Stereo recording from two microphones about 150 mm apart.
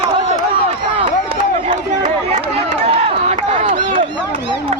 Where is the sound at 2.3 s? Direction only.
40° right (ahead or behind).